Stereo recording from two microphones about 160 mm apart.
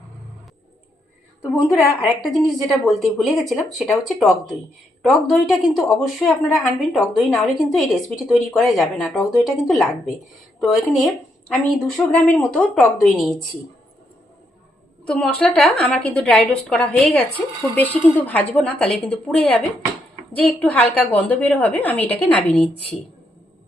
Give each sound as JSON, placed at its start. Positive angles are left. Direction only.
{"t": 1.7, "sound": "a woman's voice", "side_deg": 0}
{"t": 15.0, "sound": "a woman's voice", "side_deg": 5}